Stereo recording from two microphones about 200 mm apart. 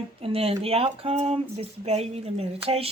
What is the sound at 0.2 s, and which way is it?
Speech, 30° right (ahead or behind).